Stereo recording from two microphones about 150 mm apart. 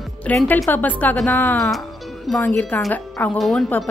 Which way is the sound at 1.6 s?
Centre (ahead or behind).